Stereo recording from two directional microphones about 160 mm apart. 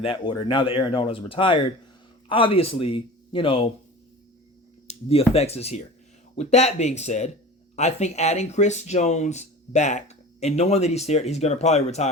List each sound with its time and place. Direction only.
0.0 s speech: 35° left (ahead or behind)
4.9 s a sound: 40° left (ahead or behind)
5.3 s speech: 40° left (ahead or behind)